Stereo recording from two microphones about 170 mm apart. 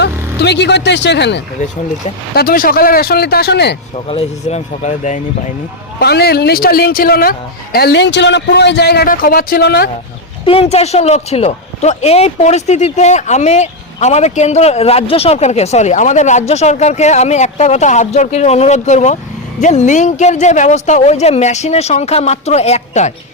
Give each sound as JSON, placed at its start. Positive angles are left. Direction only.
{"t": 0.0, "sound": "speech", "side_deg": 80}
{"t": 2.3, "sound": "speech", "side_deg": 60}
{"t": 3.9, "sound": "speech", "side_deg": 35}
{"t": 6.0, "sound": "speech", "side_deg": 70}
{"t": 10.4, "sound": "speech", "side_deg": 35}